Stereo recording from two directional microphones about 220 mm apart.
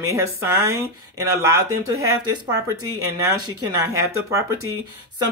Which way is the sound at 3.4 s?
15° right (ahead or behind).